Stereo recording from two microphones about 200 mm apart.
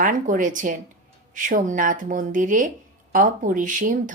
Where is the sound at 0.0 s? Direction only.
40° right (ahead or behind).